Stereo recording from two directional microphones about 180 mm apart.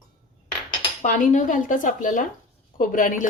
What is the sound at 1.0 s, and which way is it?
A woman's voice, 45° left (ahead or behind).